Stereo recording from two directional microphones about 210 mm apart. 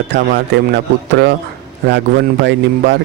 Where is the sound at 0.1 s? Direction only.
55° right (ahead or behind).